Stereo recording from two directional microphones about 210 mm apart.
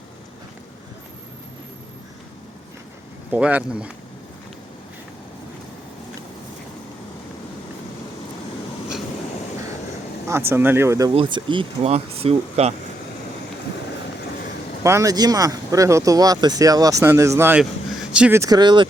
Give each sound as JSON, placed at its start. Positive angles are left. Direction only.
{"t": 3.3, "sound": "speech", "side_deg": -5}
{"t": 10.2, "sound": "speech", "side_deg": -10}
{"t": 11.1, "sound": "speech", "side_deg": -25}
{"t": 14.8, "sound": "speech", "side_deg": -15}